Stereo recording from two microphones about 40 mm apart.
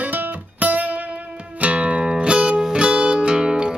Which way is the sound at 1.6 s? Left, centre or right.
Right.